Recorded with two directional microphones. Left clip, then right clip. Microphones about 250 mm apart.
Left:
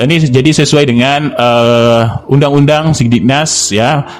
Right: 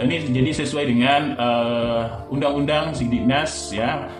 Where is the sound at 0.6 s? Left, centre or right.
Left.